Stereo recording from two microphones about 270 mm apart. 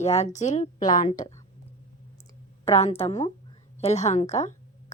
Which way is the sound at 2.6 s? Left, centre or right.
Left.